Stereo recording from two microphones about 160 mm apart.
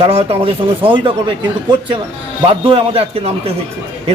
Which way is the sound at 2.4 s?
30° right (ahead or behind).